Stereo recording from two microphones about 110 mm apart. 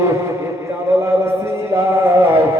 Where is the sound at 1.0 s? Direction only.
25° right (ahead or behind).